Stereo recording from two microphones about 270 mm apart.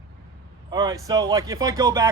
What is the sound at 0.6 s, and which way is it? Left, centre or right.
Speech, centre.